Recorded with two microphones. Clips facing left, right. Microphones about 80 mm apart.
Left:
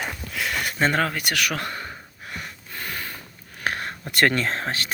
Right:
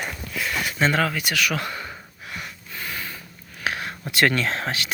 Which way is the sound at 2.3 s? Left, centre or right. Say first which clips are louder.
Even; left.